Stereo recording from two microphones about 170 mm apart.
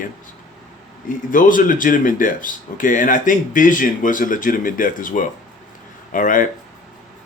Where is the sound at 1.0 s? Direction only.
50° left (ahead or behind).